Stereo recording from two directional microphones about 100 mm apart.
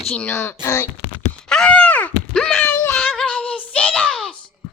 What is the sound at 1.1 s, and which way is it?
Wail, 10° left (ahead or behind).